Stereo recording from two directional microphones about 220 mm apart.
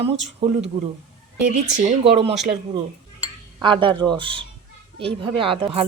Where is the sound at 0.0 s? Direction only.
30° right (ahead or behind).